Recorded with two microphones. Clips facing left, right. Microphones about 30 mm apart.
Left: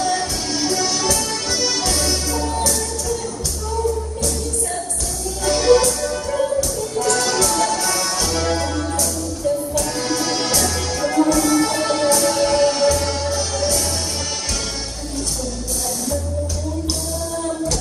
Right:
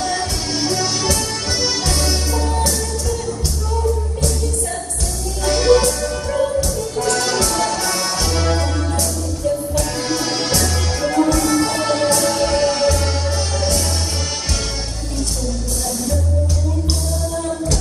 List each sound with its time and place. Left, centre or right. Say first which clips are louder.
0.0 s music: left 1 dB; centre
5.5 s music: right 1 dB; centre